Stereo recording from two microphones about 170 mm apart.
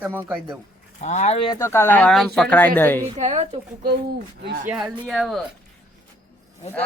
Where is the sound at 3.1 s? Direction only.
40° right (ahead or behind).